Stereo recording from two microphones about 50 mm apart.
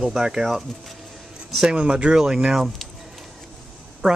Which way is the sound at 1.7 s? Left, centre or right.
Centre.